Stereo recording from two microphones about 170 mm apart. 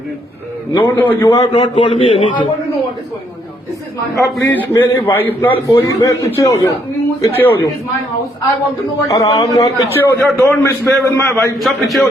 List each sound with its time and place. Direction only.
0.8 s a man's voice: 10° left (ahead or behind)
1.5 s a man's voice: 30° left (ahead or behind)
4.1 s a man's voice: 15° left (ahead or behind)
9.0 s a man's voice: 20° left (ahead or behind)
11.5 s a man's voice: centre (ahead or behind)